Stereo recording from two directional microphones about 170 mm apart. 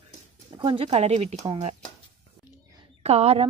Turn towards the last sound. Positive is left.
turn(degrees=-35)  # may be behind; listen again after turning